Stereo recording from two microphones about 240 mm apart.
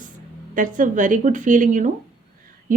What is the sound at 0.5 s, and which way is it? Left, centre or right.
Speech, right.